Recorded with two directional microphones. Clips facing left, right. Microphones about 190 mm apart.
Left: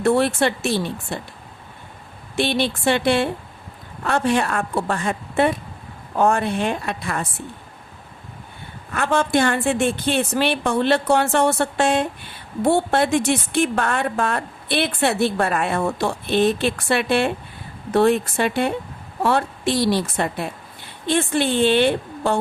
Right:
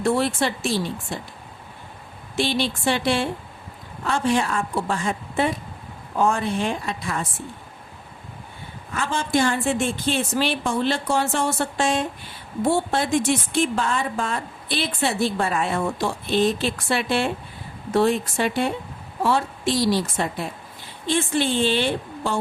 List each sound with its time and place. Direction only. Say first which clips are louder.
0.0 s a woman's voice: left 4 dB; 60° left (ahead or behind)
2.3 s a woman's voice: left 2 dB; 60° left (ahead or behind)
8.9 s a woman's voice: left 4 dB; 60° left (ahead or behind)